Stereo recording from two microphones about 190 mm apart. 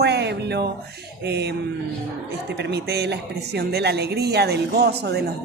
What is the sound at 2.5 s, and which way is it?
Speech, 65° right (ahead or behind).